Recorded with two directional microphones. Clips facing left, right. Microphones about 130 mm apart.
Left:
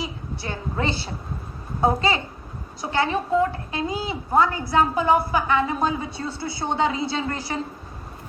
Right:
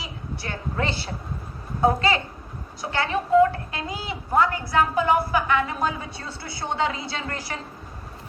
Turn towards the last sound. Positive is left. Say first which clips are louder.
# left 5 dB
turn(degrees=25)  # may be behind; listen again after turning